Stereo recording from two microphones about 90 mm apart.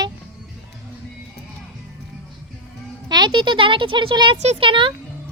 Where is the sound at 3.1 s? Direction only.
55° right (ahead or behind); by 4.9 s 75° right (ahead or behind).